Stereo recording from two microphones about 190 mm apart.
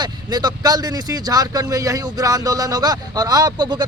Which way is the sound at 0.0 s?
20° right (ahead or behind).